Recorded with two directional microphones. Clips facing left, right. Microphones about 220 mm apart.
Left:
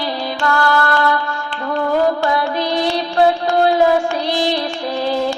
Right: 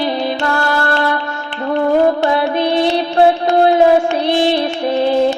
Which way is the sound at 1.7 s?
25° right (ahead or behind).